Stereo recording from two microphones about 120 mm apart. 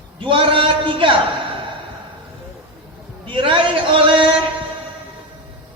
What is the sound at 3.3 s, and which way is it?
Speech, 45° right (ahead or behind).